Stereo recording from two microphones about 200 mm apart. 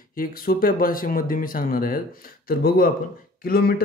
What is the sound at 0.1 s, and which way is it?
Speech, 45° left (ahead or behind).